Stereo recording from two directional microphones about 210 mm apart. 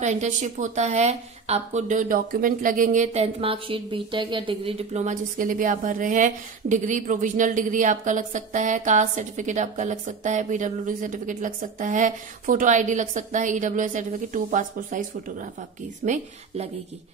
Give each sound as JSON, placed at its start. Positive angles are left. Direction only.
{"t": 0.0, "sound": "a woman's voice", "side_deg": -35}